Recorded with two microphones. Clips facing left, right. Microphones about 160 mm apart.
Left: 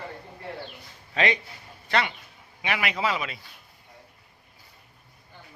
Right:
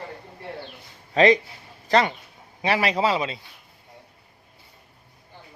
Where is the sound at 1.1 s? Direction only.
35° right (ahead or behind).